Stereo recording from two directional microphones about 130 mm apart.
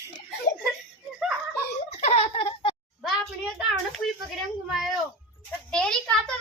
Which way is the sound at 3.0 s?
Centre (ahead or behind).